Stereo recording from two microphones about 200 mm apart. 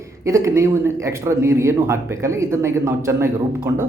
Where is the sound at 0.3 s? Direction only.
15° right (ahead or behind).